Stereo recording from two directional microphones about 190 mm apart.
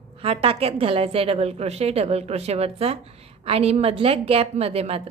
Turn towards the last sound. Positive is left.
turn(degrees=-30)  # may be behind; listen again after turning